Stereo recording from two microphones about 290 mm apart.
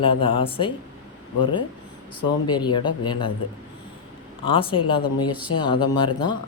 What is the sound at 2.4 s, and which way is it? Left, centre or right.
Speech, centre.